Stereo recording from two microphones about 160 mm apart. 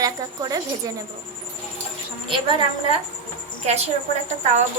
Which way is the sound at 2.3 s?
30° right (ahead or behind).